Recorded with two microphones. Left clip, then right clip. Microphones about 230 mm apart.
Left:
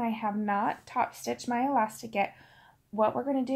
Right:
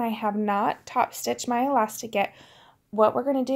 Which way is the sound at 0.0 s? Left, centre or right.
Right.